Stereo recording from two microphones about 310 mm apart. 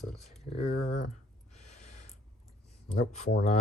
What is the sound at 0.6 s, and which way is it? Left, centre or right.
Speech, left.